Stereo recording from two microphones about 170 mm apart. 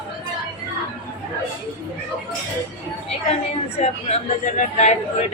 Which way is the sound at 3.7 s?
40° left (ahead or behind).